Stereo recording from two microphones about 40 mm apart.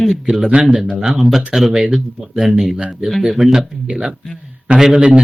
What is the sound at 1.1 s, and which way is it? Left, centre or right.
Speech, centre.